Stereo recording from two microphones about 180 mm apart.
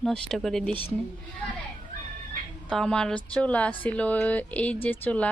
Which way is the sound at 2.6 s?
5° left (ahead or behind).